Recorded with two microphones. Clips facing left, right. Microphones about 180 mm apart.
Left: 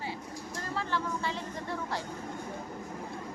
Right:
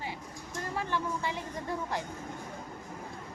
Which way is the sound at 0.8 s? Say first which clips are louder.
Even; 15° right (ahead or behind).